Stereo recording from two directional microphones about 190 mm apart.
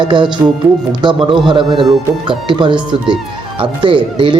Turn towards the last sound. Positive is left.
turn(degrees=-25)  # may be behind; listen again after turning